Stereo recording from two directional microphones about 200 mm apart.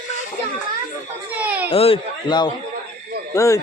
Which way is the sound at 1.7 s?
30° left (ahead or behind).